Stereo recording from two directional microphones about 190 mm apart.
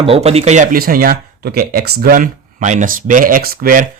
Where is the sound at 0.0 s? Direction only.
30° right (ahead or behind).